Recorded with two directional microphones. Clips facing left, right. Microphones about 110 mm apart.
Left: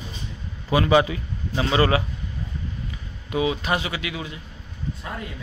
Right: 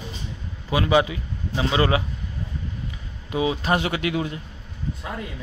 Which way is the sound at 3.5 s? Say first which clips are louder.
Right 3 dB; 40° right (ahead or behind).